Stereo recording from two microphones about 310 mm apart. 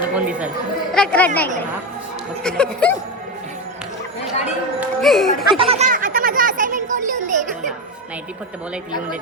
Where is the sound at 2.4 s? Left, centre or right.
Centre.